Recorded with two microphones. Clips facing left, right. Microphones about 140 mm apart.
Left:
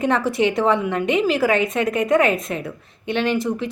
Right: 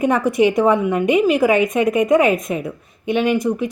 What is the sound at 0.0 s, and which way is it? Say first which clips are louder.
A woman's voice: right 4 dB; 15° right (ahead or behind).